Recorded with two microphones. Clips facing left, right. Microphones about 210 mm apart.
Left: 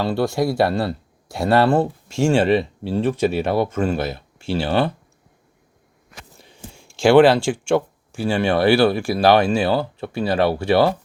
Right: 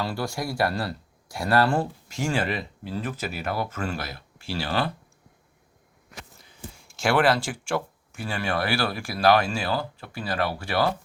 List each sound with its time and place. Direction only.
0.0 s speech: 25° left (ahead or behind)
6.7 s speech: 30° left (ahead or behind)